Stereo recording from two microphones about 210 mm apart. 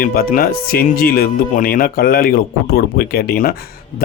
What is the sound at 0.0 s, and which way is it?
Speech, 45° left (ahead or behind).